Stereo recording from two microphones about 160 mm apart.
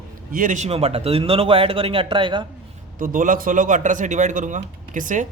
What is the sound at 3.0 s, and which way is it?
A man's voice, 60° right (ahead or behind).